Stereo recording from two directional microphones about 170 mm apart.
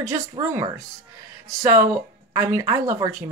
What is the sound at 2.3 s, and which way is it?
Speech, 20° right (ahead or behind).